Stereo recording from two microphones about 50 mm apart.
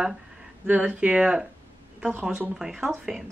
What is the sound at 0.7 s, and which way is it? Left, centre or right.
Speech, right.